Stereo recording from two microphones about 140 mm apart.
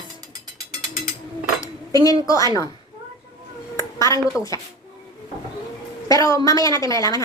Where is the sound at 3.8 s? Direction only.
20° left (ahead or behind).